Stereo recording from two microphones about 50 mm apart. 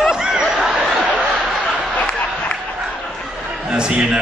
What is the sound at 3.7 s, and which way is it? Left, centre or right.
Speech, centre.